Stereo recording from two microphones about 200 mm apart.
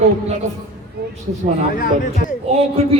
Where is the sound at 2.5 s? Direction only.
30° right (ahead or behind).